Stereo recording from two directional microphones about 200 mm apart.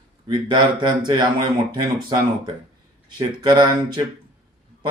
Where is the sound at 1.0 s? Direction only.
20° right (ahead or behind).